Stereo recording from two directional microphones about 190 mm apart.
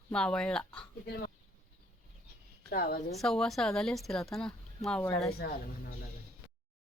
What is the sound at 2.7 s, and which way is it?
Speech, 50° left (ahead or behind).